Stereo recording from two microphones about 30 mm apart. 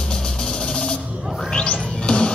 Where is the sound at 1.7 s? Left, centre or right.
Left.